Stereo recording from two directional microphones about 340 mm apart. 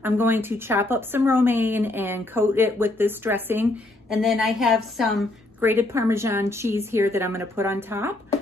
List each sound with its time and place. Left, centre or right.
0.0 s a woman's voice: centre